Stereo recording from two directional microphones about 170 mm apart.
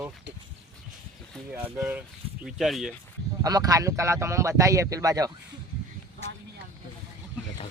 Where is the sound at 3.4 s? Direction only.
20° right (ahead or behind).